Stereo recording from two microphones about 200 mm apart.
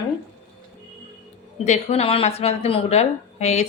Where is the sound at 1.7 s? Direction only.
30° left (ahead or behind).